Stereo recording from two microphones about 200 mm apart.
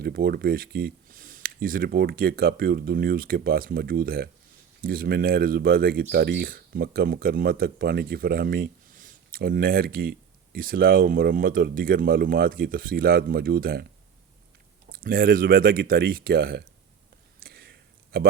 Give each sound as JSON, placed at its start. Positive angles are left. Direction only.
{"t": 0.0, "sound": "speech", "side_deg": -50}
{"t": 14.8, "sound": "speech", "side_deg": -45}
{"t": 17.4, "sound": "a sound", "side_deg": -50}